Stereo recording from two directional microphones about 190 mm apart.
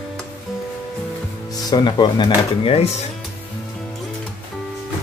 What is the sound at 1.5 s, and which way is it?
Speech, 20° left (ahead or behind).